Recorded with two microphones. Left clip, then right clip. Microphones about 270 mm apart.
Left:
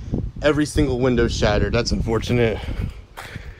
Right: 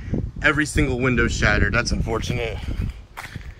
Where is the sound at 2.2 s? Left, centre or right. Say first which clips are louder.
Left 7 dB; left.